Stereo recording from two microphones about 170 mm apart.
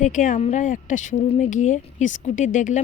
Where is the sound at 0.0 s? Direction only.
50° left (ahead or behind).